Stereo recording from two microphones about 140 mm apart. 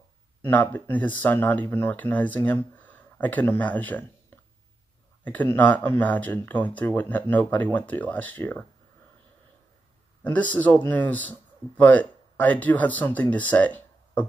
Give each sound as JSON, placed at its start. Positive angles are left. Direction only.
{"t": 0.4, "sound": "speech", "side_deg": 15}
{"t": 5.2, "sound": "speech", "side_deg": 10}
{"t": 10.2, "sound": "speech", "side_deg": 10}